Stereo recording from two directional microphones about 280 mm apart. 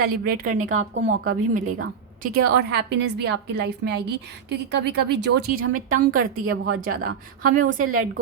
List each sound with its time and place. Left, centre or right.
0.0 s a woman's voice: right
6.4 s a woman's voice: right